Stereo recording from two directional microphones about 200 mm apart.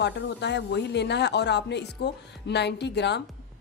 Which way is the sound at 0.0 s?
60° left (ahead or behind).